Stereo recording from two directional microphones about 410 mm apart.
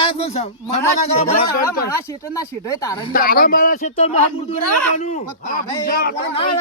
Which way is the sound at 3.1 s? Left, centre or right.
Left.